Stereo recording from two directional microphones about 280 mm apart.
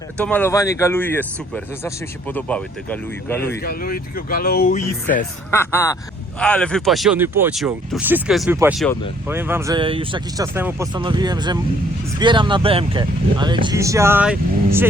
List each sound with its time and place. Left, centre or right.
0.2 s speech: centre
3.6 s speech: left
5.5 s speech: centre